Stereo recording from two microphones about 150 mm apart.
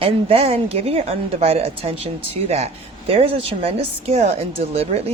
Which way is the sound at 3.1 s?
40° right (ahead or behind).